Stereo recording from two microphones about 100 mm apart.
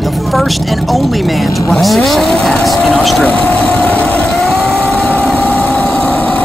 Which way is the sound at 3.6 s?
10° left (ahead or behind).